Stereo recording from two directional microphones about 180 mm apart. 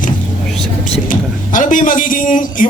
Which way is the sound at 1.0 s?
45° left (ahead or behind).